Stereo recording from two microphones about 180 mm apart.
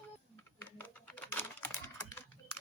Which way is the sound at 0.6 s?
10° left (ahead or behind).